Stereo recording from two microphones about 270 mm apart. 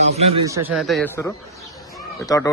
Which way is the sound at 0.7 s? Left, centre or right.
Centre.